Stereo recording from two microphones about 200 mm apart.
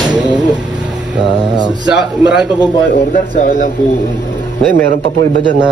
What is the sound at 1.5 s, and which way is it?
Speech, 20° right (ahead or behind).